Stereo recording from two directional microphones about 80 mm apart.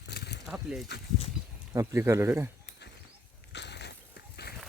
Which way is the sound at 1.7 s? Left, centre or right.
Right.